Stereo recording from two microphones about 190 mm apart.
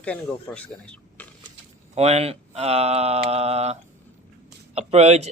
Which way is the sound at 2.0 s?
35° right (ahead or behind).